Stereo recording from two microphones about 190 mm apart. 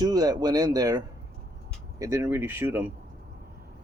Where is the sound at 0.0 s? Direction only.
20° right (ahead or behind).